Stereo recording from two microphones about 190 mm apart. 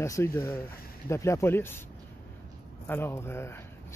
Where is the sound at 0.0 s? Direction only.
15° left (ahead or behind).